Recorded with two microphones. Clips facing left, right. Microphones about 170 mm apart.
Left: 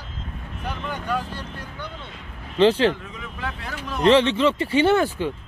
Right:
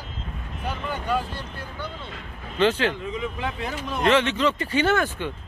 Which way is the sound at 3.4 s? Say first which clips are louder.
Right 3 dB; 15° right (ahead or behind).